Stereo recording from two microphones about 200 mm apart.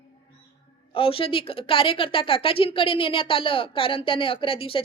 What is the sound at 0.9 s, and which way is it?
A woman's voice, 25° left (ahead or behind).